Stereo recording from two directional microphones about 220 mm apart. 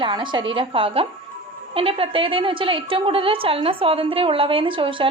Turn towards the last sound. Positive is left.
turn(degrees=-25)  # may be behind; listen again after turning